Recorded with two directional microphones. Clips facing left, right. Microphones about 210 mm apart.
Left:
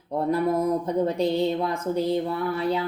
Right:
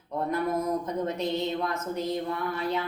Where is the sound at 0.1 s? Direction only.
30° left (ahead or behind).